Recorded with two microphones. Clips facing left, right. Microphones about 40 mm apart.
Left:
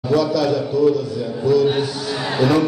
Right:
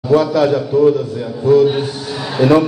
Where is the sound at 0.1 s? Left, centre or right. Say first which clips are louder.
Right 5 dB; right.